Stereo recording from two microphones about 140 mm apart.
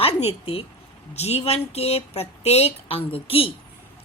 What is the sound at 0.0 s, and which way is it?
A woman's voice, 45° left (ahead or behind).